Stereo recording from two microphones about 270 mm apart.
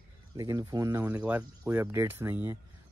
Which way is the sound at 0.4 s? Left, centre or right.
Centre.